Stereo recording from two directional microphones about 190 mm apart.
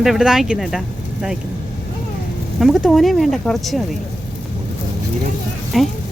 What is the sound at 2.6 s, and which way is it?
Speech, centre (ahead or behind).